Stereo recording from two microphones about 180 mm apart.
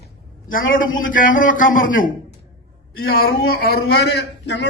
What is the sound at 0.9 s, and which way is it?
A man's voice, 50° left (ahead or behind).